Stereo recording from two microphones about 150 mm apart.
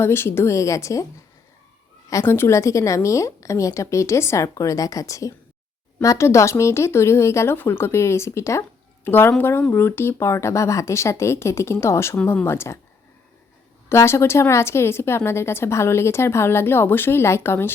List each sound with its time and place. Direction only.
0.0 s a woman's voice: 15° left (ahead or behind)
2.0 s a woman's voice: 20° left (ahead or behind)
13.9 s a woman's voice: 20° left (ahead or behind)